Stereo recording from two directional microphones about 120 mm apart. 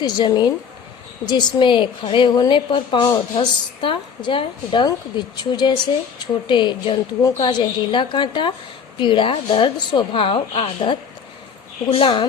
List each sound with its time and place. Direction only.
0.0 s a woman's voice: 35° left (ahead or behind)
7.2 s a woman's voice: 30° left (ahead or behind)
7.4 s a woman's voice: 45° left (ahead or behind)